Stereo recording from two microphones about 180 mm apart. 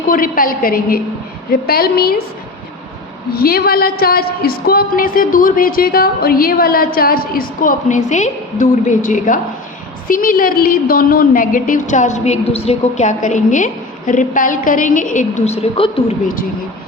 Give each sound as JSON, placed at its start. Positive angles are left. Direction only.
{"t": 0.1, "sound": "a woman's voice", "side_deg": 50}
{"t": 3.3, "sound": "a woman's voice", "side_deg": 55}